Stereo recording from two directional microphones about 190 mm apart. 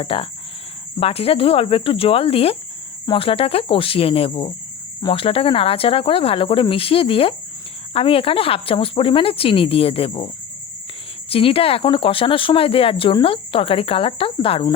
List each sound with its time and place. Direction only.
0.0 s speech: 30° left (ahead or behind)